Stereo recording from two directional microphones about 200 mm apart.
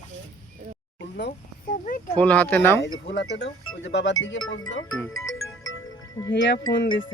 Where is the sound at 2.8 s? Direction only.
60° left (ahead or behind).